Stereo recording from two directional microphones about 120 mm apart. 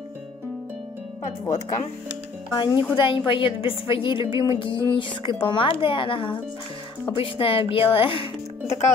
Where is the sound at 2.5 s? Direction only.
40° left (ahead or behind).